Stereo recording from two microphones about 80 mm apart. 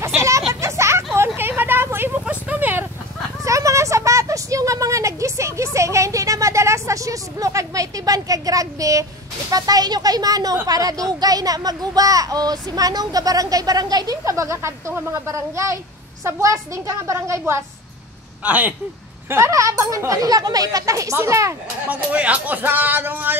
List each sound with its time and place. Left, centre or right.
0.0 s a sound: right
0.5 s vehicle: right
2.2 s a sound: centre
3.4 s a sound: right
9.5 s a child's voice: right
14.2 s speech: right
18.4 s speech: centre
19.2 s a child's voice: right
21.8 s speech: centre